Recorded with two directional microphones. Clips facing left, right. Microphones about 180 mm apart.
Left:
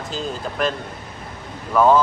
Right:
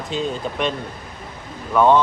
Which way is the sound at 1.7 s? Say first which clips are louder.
Even; 5° left (ahead or behind).